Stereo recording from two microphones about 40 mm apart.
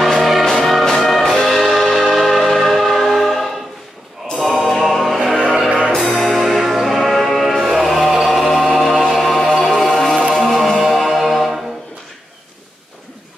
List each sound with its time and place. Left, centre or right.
0.0 s music: centre
1.6 s choir: centre
4.3 s music: centre
5.4 s music: centre
5.9 s music: centre
9.5 s music: centre